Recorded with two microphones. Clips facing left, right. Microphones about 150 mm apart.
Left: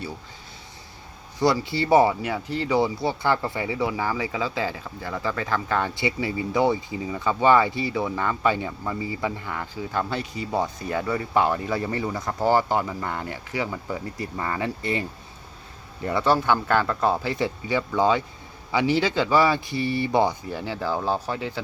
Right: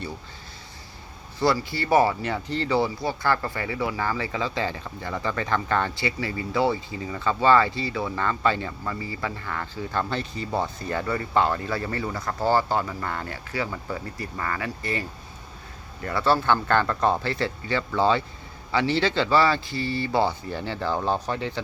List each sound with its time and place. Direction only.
1.4 s speech: 20° left (ahead or behind)
2.2 s speech: 5° left (ahead or behind)
6.0 s speech: 20° left (ahead or behind)
20.5 s speech: 5° left (ahead or behind)